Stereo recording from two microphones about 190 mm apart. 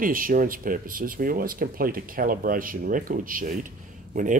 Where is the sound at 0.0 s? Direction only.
45° right (ahead or behind).